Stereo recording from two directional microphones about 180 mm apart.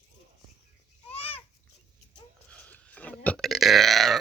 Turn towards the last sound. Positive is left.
turn(degrees=0)  # may be behind; listen again after turning